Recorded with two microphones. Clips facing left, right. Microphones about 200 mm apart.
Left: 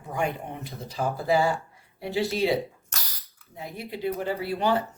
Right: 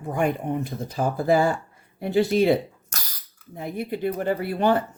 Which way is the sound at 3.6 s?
55° right (ahead or behind).